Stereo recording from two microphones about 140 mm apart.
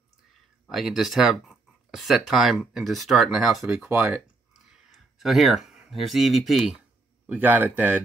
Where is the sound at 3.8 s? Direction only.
15° right (ahead or behind).